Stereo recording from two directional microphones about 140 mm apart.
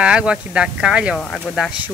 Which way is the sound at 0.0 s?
5° right (ahead or behind).